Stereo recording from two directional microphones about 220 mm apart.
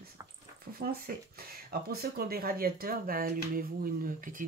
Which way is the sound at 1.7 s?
45° right (ahead or behind).